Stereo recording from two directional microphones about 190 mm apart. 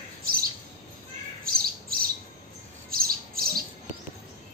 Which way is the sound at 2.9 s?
50° right (ahead or behind).